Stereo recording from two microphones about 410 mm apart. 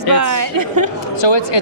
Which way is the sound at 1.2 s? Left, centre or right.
Left.